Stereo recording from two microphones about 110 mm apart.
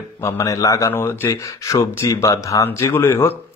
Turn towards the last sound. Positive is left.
turn(degrees=20)  # may be behind; listen again after turning